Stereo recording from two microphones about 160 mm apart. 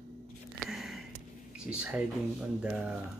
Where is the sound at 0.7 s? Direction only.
Centre (ahead or behind).